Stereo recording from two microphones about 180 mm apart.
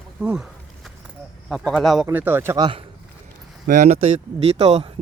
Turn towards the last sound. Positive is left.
turn(degrees=-35)  # may be behind; listen again after turning